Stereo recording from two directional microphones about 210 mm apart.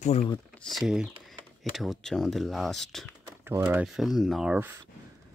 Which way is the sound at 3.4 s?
10° right (ahead or behind).